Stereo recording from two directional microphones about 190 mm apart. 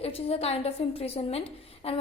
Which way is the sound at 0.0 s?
30° left (ahead or behind).